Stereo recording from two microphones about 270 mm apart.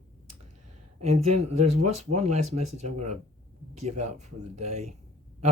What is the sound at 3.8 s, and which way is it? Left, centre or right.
Speech, right.